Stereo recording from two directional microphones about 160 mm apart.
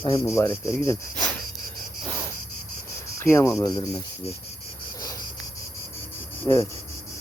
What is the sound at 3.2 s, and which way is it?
Speech, 15° left (ahead or behind).